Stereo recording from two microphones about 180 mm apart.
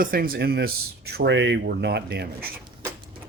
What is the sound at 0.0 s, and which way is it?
Speech, 55° right (ahead or behind).